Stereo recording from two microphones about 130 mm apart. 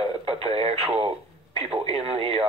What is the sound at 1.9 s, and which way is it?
Speech, 50° right (ahead or behind).